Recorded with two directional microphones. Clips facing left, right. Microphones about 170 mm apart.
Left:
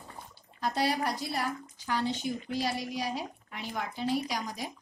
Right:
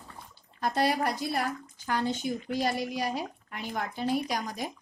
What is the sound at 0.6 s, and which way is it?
A woman's voice, 55° right (ahead or behind).